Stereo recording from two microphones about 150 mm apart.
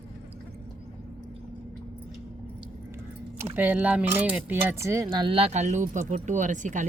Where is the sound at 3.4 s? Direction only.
10° right (ahead or behind).